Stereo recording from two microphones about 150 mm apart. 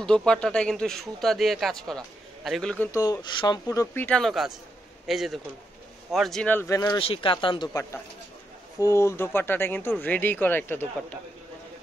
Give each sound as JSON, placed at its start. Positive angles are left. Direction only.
{"t": 0.0, "sound": "speech", "side_deg": 5}
{"t": 2.9, "sound": "speech", "side_deg": 25}
{"t": 6.5, "sound": "speech", "side_deg": 15}
{"t": 7.0, "sound": "speech", "side_deg": 35}
{"t": 8.7, "sound": "speech", "side_deg": 20}